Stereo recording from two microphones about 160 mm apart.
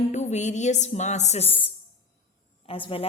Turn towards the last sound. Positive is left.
turn(degrees=35)  # may be behind; listen again after turning